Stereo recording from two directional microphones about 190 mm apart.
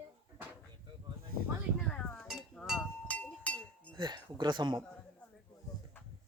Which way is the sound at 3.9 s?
25° right (ahead or behind).